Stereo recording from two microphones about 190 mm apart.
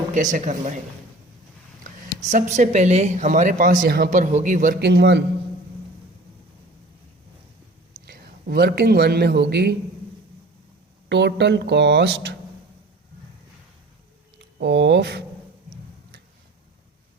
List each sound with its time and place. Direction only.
0.1 s speech: 40° right (ahead or behind)
2.3 s a woman's voice: 40° right (ahead or behind); by 5.2 s 65° right (ahead or behind)
8.0 s a man's voice: 55° right (ahead or behind)
11.1 s speech: 65° right (ahead or behind)
14.3 s speech: 65° right (ahead or behind)